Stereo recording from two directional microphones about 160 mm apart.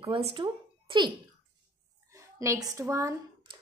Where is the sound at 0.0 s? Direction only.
35° right (ahead or behind).